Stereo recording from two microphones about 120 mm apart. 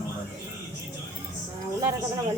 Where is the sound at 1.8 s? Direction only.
25° right (ahead or behind).